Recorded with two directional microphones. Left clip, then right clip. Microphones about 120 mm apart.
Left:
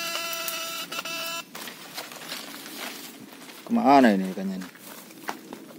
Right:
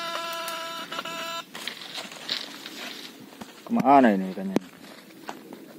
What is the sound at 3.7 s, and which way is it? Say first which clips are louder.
Speech: even; 10° left (ahead or behind).